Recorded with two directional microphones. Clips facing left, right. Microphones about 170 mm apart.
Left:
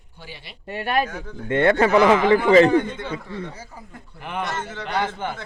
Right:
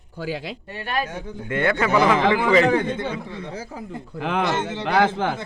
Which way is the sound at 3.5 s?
90° right.